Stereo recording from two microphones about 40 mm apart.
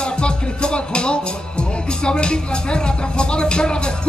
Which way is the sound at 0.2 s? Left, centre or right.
Left.